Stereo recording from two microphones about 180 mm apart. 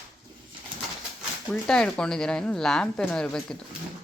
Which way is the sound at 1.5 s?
5° left (ahead or behind).